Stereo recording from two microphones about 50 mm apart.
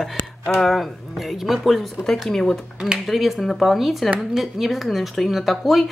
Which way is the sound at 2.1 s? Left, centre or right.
Centre.